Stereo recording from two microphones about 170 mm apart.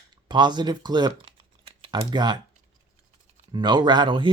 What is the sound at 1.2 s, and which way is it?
Computer keyboard, 35° right (ahead or behind).